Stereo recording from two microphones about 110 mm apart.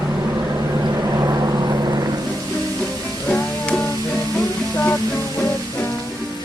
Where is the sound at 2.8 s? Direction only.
10° left (ahead or behind); by 5.8 s 25° left (ahead or behind).